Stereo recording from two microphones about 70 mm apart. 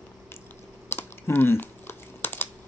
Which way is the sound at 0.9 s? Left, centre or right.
Left.